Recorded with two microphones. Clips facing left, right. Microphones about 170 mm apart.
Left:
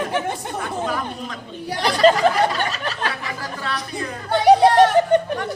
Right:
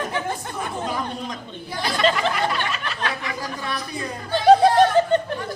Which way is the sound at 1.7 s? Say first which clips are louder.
Left 5 dB; 75° left (ahead or behind).